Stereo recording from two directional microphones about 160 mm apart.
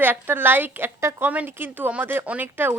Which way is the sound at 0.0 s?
15° right (ahead or behind).